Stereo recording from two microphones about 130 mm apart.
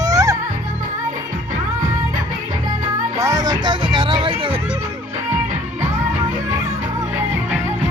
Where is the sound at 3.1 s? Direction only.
25° right (ahead or behind); by 4.6 s 45° right (ahead or behind).